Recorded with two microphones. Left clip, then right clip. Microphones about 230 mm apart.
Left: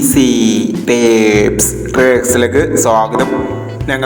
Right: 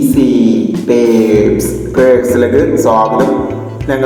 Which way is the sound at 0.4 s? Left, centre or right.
Left.